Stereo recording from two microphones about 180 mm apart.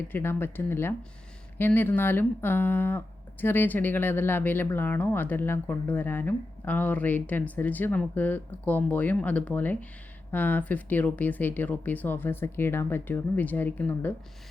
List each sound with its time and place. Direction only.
0.1 s speech: 10° left (ahead or behind)